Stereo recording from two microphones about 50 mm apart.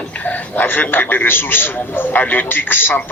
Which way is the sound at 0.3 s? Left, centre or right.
Left.